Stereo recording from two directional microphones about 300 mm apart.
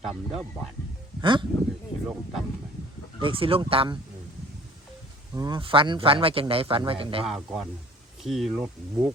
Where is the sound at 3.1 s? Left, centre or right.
Centre.